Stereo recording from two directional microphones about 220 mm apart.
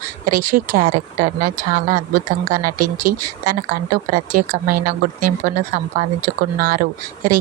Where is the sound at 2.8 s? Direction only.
40° right (ahead or behind).